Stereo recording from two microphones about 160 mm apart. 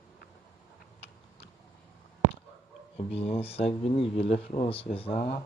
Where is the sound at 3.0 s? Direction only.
40° left (ahead or behind).